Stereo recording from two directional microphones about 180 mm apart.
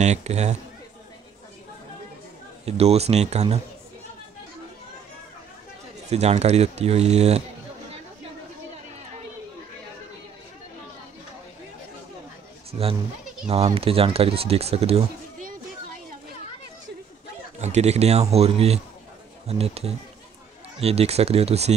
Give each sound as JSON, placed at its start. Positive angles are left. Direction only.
{"t": 0.0, "sound": "speech", "side_deg": -40}
{"t": 2.6, "sound": "speech", "side_deg": -35}
{"t": 6.0, "sound": "speech", "side_deg": -35}
{"t": 13.5, "sound": "speech", "side_deg": -35}
{"t": 17.6, "sound": "speech", "side_deg": -40}